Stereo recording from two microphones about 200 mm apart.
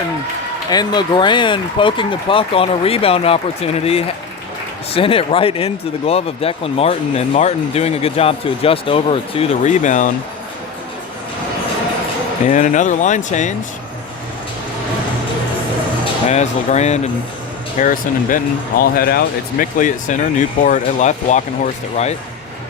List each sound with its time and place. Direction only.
0.7 s speech: 20° left (ahead or behind); by 10.1 s 40° left (ahead or behind)
12.5 s speech: 40° left (ahead or behind)
16.3 s speech: 35° left (ahead or behind)